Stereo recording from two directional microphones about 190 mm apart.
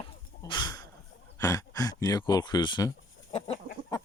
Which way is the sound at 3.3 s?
30° left (ahead or behind).